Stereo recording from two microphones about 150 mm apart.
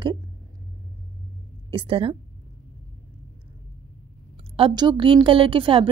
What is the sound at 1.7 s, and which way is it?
Speech, 35° right (ahead or behind).